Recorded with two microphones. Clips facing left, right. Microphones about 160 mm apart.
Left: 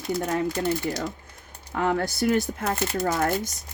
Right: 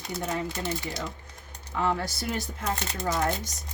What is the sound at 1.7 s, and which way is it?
Speech, 50° left (ahead or behind).